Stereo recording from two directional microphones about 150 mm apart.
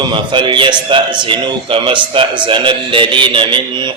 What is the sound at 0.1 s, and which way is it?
A man's voice, 35° right (ahead or behind).